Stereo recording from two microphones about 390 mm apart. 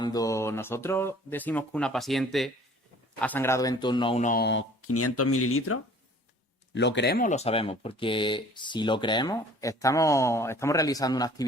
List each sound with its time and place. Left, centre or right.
0.0 s speech: centre